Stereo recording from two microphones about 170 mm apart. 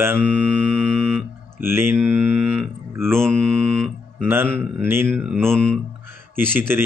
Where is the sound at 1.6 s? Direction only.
15° right (ahead or behind).